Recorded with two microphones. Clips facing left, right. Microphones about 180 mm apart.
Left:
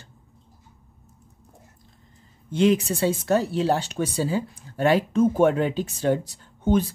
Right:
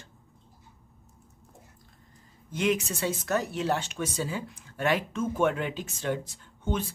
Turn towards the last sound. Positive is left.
turn(degrees=40)  # may be behind; listen again after turning